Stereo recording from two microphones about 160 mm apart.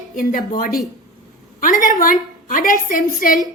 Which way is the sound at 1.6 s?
55° left (ahead or behind).